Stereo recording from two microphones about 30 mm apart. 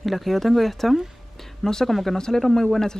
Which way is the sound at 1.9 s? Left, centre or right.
Centre.